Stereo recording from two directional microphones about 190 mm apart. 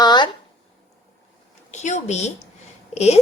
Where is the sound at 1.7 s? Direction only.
35° left (ahead or behind).